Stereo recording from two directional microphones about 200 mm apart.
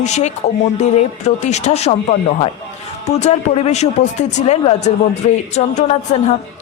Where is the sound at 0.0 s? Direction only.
35° left (ahead or behind).